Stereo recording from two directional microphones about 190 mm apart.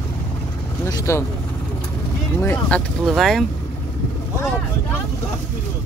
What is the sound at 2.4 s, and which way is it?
Speech, 10° left (ahead or behind).